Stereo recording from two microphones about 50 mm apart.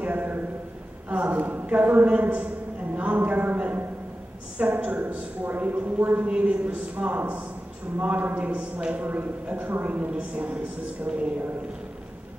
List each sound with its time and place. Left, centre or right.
0.0 s a sound: right
1.0 s a man's voice: right
5.4 s a man's voice: right